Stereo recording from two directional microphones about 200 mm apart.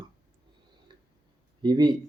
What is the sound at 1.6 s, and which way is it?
Speech, 20° right (ahead or behind).